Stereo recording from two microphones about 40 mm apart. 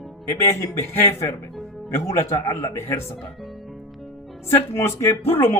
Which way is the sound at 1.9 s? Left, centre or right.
Left.